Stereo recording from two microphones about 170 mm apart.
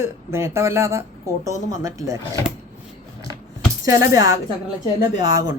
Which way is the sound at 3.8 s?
20° right (ahead or behind).